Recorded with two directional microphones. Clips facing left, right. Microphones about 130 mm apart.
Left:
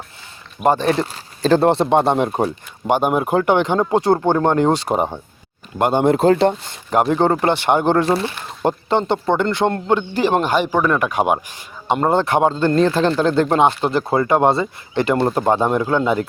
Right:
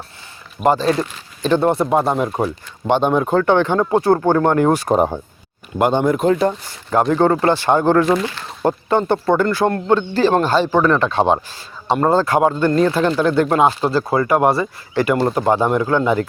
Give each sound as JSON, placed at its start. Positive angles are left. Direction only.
{"t": 0.9, "sound": "speech", "side_deg": 35}
{"t": 2.8, "sound": "speech", "side_deg": 10}
{"t": 6.0, "sound": "speech", "side_deg": 30}
{"t": 6.4, "sound": "a sound", "side_deg": 25}
{"t": 7.1, "sound": "speech", "side_deg": 20}
{"t": 8.0, "sound": "speech", "side_deg": 30}